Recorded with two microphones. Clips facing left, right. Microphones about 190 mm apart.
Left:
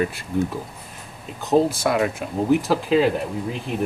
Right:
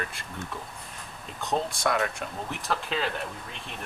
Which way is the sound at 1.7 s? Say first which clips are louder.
Left 6 dB; 5° left (ahead or behind).